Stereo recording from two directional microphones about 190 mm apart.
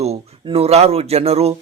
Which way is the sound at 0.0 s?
35° right (ahead or behind).